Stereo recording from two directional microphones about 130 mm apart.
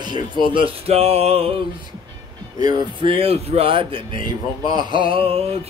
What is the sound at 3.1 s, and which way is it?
A man's voice, 50° right (ahead or behind).